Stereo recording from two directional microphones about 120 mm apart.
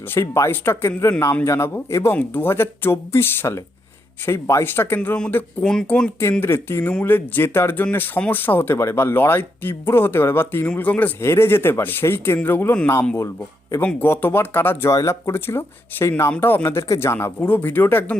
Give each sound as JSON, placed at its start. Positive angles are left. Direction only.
{"t": 0.1, "sound": "speech", "side_deg": 25}
{"t": 6.4, "sound": "speech", "side_deg": 20}